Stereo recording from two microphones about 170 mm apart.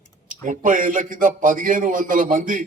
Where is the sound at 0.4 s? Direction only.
50° right (ahead or behind).